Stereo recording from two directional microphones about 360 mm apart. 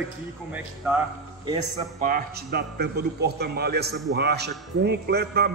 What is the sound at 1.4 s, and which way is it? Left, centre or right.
A man's voice, centre.